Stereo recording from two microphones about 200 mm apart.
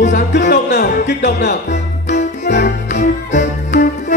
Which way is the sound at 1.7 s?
35° left (ahead or behind).